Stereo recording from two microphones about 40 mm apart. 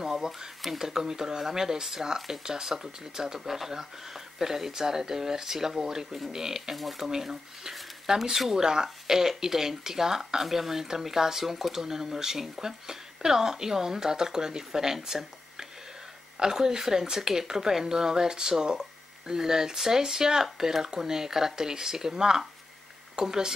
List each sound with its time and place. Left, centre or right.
0.0 s speech: centre